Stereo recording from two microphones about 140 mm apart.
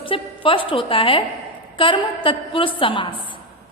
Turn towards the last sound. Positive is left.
turn(degrees=40)  # may be behind; listen again after turning